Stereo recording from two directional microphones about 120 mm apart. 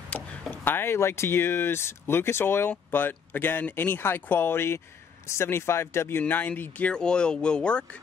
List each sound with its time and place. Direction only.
0.1 s speech: 10° left (ahead or behind)